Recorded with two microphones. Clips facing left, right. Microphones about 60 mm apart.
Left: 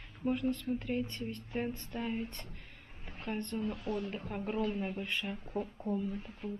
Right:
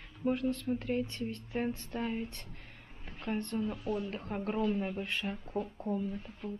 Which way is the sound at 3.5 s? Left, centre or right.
Centre.